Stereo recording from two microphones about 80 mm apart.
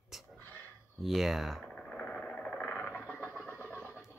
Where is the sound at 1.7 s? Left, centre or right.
Centre.